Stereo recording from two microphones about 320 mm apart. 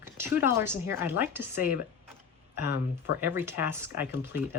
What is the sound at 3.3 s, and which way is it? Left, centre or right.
Speech, centre.